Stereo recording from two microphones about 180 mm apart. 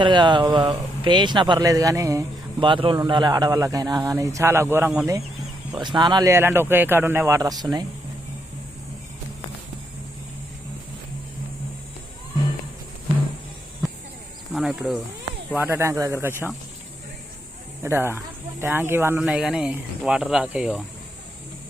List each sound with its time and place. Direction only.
0.0 s speech: 25° right (ahead or behind)
5.7 s speech: 25° right (ahead or behind)
14.5 s speech: 5° right (ahead or behind)
17.8 s speech: 15° right (ahead or behind)